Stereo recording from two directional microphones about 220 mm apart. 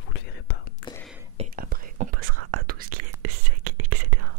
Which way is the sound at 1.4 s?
40° right (ahead or behind).